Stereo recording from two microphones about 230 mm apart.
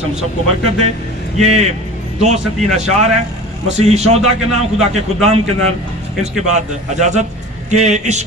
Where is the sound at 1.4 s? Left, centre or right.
Right.